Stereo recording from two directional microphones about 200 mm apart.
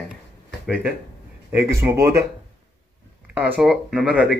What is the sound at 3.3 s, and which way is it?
Speech, 5° right (ahead or behind).